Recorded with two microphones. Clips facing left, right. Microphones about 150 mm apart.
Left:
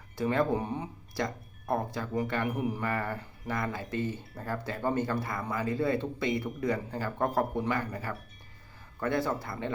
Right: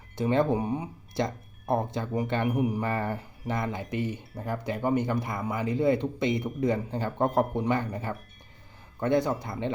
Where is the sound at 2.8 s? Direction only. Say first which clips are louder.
Right 3 dB; 30° right (ahead or behind).